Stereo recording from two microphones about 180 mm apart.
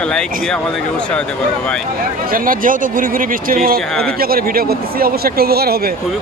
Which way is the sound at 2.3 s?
50° right (ahead or behind).